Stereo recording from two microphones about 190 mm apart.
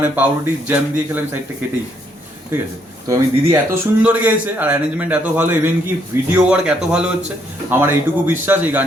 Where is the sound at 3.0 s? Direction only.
15° right (ahead or behind).